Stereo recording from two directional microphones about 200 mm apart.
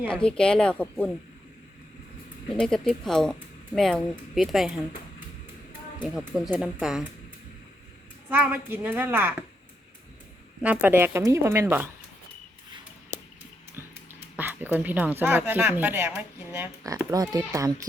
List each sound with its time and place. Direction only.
0.1 s speech: 5° left (ahead or behind)
2.6 s speech: 5° left (ahead or behind)
6.0 s speech: centre (ahead or behind)
8.3 s speech: 10° right (ahead or behind)
10.6 s speech: 5° right (ahead or behind)
13.1 s a sound: 35° left (ahead or behind)
13.8 s dog: 10° right (ahead or behind)
14.3 s speech: 10° right (ahead or behind)